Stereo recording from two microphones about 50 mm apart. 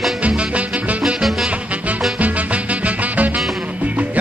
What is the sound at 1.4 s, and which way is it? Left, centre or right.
Music, right.